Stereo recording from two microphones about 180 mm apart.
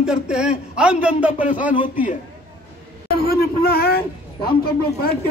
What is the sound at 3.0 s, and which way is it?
Speech, 60° left (ahead or behind).